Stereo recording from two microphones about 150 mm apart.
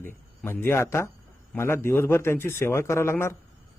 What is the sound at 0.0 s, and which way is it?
A man's voice, 15° left (ahead or behind).